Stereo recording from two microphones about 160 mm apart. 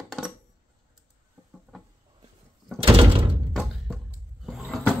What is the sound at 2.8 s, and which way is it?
Door, 35° right (ahead or behind).